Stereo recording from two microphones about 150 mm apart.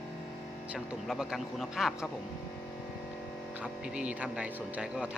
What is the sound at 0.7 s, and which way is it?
Speech, 5° right (ahead or behind).